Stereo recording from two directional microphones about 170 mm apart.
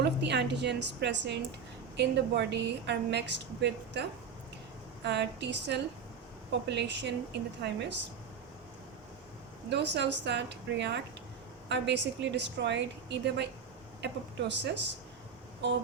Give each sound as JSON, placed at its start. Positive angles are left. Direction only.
{"t": 0.0, "sound": "a woman's voice", "side_deg": -85}
{"t": 5.0, "sound": "a woman's voice", "side_deg": -90}
{"t": 9.6, "sound": "a woman's voice", "side_deg": -90}